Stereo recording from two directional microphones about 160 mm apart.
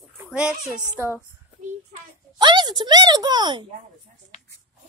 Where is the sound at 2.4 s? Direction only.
25° right (ahead or behind).